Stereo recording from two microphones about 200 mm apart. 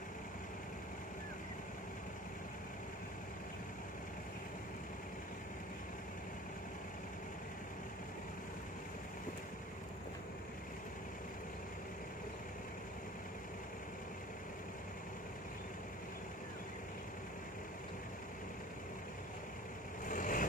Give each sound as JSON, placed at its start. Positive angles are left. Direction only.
{"t": 20.1, "sound": "vehicle", "side_deg": 40}